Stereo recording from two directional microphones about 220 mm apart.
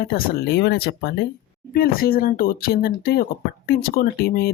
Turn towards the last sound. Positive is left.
turn(degrees=45)  # may be behind; listen again after turning